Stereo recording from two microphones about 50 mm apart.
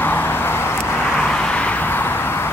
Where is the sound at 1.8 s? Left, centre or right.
Left.